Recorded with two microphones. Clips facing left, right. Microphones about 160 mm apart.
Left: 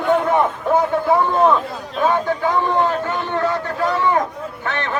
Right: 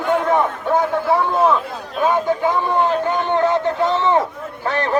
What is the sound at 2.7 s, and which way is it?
Speech, 20° right (ahead or behind).